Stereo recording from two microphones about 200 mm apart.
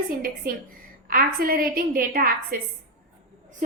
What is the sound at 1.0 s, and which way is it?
A woman's voice, 45° right (ahead or behind).